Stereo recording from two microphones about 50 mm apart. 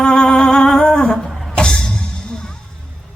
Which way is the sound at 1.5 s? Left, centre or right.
Centre.